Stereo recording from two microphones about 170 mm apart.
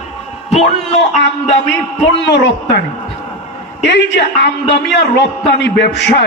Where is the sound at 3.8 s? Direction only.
85° left.